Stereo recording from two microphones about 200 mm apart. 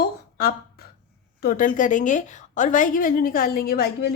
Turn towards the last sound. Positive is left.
turn(degrees=55)  # may be behind; listen again after turning